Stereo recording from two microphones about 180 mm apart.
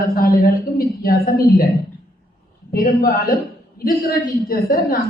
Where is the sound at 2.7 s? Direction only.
55° left (ahead or behind).